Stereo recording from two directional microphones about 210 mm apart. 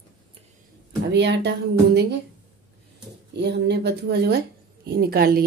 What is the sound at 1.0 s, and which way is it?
Speech, 55° right (ahead or behind).